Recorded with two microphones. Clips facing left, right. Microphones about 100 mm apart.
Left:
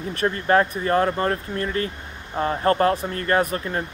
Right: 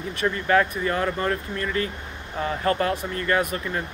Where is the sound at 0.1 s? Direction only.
40° left (ahead or behind).